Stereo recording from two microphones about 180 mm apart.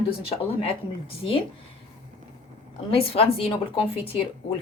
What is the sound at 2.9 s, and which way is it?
A woman's voice, 30° left (ahead or behind).